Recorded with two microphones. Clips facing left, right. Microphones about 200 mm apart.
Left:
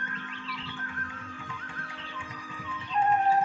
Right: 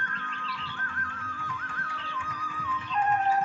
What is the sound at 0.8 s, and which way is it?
Music, 20° left (ahead or behind).